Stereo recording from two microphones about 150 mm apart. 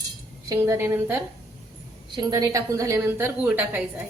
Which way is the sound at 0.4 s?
20° right (ahead or behind).